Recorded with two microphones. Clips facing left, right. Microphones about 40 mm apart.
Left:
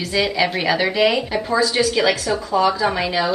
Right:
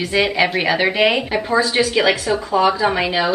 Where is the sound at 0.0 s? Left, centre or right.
Right.